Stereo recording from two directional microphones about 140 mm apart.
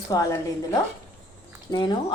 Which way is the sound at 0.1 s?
25° left (ahead or behind).